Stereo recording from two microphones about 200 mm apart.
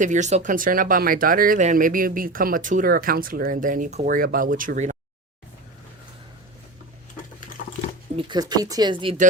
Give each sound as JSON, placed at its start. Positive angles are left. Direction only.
{"t": 0.0, "sound": "speech", "side_deg": -35}
{"t": 8.1, "sound": "speech", "side_deg": -20}